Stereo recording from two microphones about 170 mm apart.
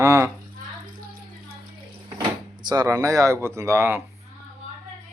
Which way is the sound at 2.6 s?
20° right (ahead or behind).